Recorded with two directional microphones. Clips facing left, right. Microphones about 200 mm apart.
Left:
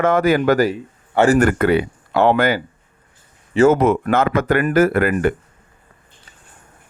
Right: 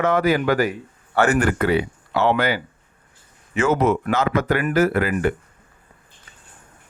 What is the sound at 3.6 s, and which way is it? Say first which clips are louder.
Speech: left 4 dB; 50° left (ahead or behind).